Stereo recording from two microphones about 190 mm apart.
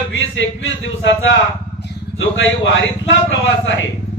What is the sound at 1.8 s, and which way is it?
Speech, 80° left.